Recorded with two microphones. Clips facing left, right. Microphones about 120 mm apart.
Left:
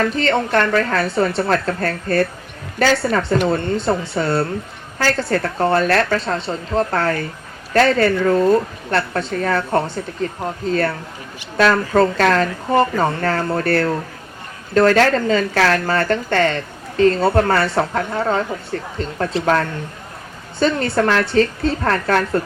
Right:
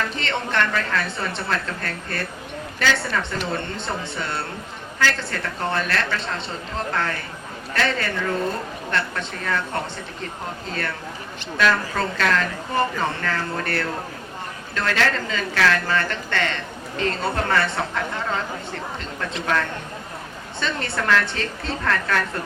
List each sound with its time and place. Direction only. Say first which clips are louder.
0.0 s a woman's voice: left 8 dB; 40° left (ahead or behind)